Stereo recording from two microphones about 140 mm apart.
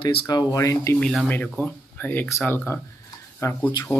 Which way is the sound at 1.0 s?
5° left (ahead or behind).